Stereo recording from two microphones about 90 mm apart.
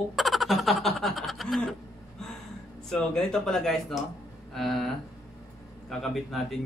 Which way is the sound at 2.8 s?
5° left (ahead or behind).